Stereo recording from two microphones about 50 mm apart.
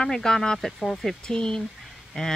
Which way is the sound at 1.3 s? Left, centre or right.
Centre.